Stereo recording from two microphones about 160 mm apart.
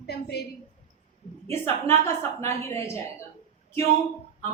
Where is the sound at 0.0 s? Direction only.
85° left.